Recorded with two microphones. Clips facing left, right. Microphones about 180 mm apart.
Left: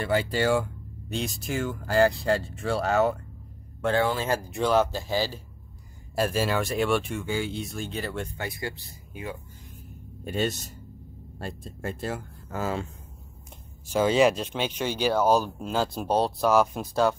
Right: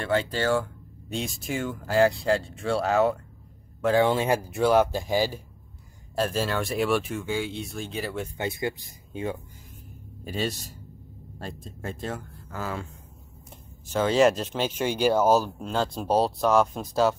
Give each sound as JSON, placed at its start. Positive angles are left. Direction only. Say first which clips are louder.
{"t": 0.0, "sound": "speech", "louder": "left 1 dB", "side_deg": 5}
{"t": 1.1, "sound": "speech", "louder": "even", "side_deg": 0}
{"t": 4.0, "sound": "speech", "louder": "right 5 dB", "side_deg": -20}
{"t": 4.4, "sound": "speech", "louder": "right 2 dB", "side_deg": -5}
{"t": 6.1, "sound": "speech", "louder": "left 1 dB", "side_deg": 10}
{"t": 8.4, "sound": "speech", "louder": "right 4 dB", "side_deg": -20}
{"t": 10.2, "sound": "speech", "louder": "left 2 dB", "side_deg": 0}
{"t": 12.4, "sound": "speech", "louder": "left 4 dB", "side_deg": 20}
{"t": 13.8, "sound": "speech", "louder": "even", "side_deg": 10}
{"t": 15.6, "sound": "speech", "louder": "even", "side_deg": 5}